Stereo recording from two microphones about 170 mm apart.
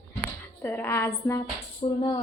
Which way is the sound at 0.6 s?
15° left (ahead or behind).